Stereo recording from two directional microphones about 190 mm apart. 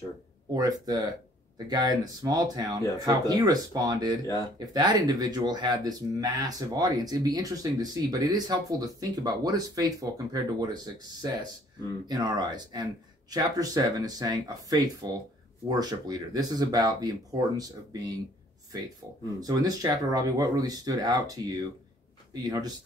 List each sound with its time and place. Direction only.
0.6 s speech: 20° right (ahead or behind)
19.4 s speech: 20° right (ahead or behind)